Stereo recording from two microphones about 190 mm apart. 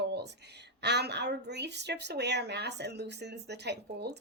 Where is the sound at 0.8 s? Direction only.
60° right (ahead or behind).